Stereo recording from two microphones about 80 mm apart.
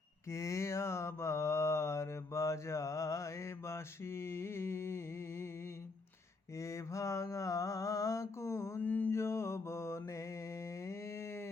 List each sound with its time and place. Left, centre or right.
0.3 s mantra: left
6.6 s mantra: left
8.8 s mantra: left
9.1 s mantra: left